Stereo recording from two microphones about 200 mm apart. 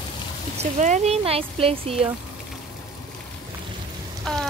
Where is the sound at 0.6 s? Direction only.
35° right (ahead or behind).